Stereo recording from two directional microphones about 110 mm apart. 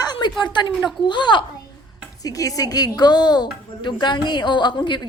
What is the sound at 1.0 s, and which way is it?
Speech, 45° left (ahead or behind).